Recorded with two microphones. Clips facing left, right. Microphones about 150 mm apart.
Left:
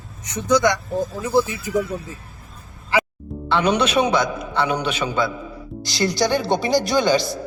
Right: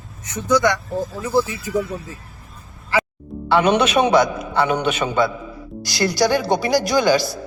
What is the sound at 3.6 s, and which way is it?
A man's voice, 55° right (ahead or behind).